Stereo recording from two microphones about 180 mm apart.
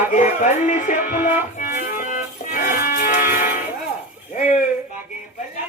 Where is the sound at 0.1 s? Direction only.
45° left (ahead or behind).